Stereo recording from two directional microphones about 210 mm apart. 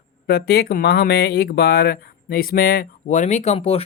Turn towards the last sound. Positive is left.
turn(degrees=30)  # may be behind; listen again after turning